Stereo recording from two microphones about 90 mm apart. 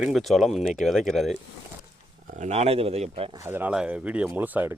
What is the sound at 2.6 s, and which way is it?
Speech, 90° right.